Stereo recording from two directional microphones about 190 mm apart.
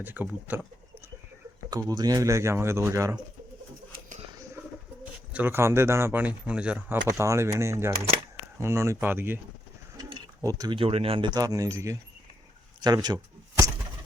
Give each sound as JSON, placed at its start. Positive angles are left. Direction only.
{"t": 0.0, "sound": "speech", "side_deg": -10}
{"t": 1.7, "sound": "speech", "side_deg": -20}
{"t": 5.3, "sound": "speech", "side_deg": -10}